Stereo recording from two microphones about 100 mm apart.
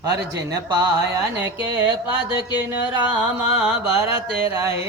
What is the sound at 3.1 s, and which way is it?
Music, 15° right (ahead or behind).